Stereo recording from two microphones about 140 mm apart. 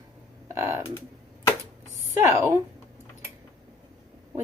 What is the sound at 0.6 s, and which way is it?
Speech, 20° right (ahead or behind).